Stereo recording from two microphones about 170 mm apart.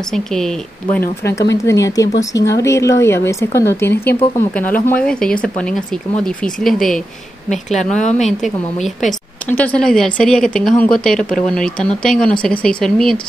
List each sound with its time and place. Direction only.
0.1 s speech: 5° left (ahead or behind)
1.6 s speech: 20° left (ahead or behind); by 8.0 s centre (ahead or behind)
8.0 s a woman's voice: 40° left (ahead or behind)
8.4 s speech: centre (ahead or behind)